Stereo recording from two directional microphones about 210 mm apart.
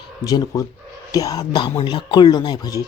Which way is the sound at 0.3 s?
15° left (ahead or behind).